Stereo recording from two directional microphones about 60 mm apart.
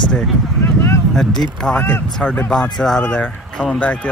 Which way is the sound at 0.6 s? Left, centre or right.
Left.